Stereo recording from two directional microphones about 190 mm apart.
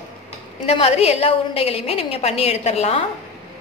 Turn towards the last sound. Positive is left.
turn(degrees=35)  # may be behind; listen again after turning